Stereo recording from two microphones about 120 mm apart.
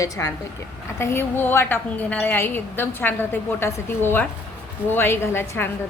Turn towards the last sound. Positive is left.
turn(degrees=20)  # may be behind; listen again after turning